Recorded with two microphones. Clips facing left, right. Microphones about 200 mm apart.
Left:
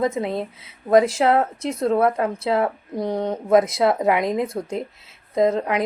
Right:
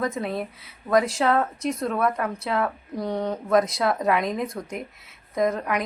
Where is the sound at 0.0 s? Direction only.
25° left (ahead or behind).